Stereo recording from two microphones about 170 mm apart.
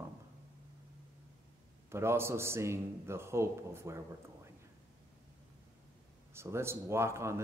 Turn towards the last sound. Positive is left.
turn(degrees=-15)  # may be behind; listen again after turning